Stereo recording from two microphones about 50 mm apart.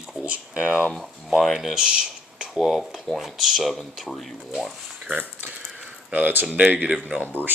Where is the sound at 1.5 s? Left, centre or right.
Centre.